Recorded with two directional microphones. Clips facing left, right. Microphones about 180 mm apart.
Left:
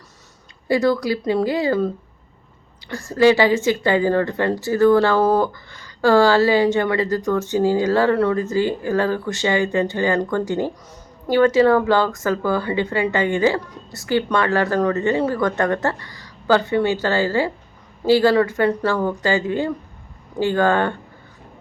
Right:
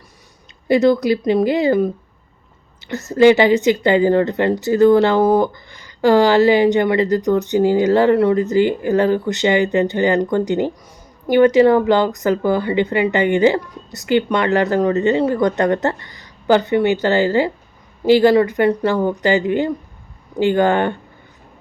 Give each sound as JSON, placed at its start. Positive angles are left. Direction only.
{"t": 0.7, "sound": "speech", "side_deg": -20}
{"t": 2.9, "sound": "speech", "side_deg": -20}